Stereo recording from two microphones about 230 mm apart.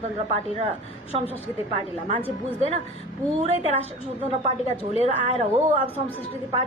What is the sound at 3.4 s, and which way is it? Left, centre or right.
A woman's voice, right.